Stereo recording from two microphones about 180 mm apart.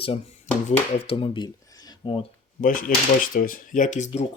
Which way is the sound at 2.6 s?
50° left (ahead or behind).